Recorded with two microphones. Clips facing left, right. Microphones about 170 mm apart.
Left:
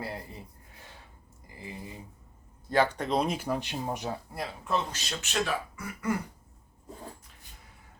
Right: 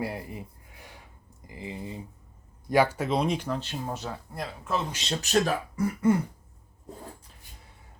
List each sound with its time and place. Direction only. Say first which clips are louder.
0.0 s a sound: right 5 dB; 15° right (ahead or behind)
1.5 s speech: right 5 dB; 20° right (ahead or behind)
2.6 s speech: right 3 dB; 10° right (ahead or behind); by 4.1 s 15° left (ahead or behind)
4.4 s speech: right 1 dB; centre (ahead or behind)
5.0 s speech: right 6 dB; 40° right (ahead or behind)